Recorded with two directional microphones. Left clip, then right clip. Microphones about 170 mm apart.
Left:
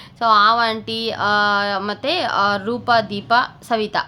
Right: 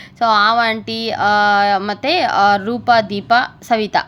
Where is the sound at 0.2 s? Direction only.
15° right (ahead or behind).